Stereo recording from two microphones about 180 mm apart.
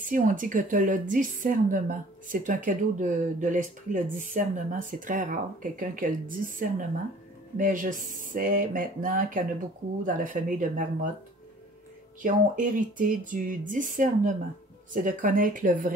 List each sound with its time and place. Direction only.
0.0 s a woman's voice: 45° right (ahead or behind)
7.5 s a woman's voice: 45° right (ahead or behind)
12.2 s a woman's voice: 45° right (ahead or behind)